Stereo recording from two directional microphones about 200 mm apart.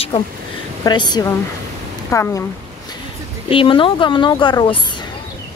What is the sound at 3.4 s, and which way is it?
A woman's voice, 25° left (ahead or behind).